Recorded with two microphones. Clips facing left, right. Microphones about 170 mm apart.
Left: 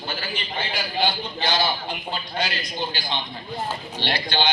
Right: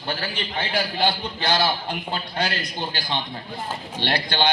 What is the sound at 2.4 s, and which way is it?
A man's voice, 55° right (ahead or behind).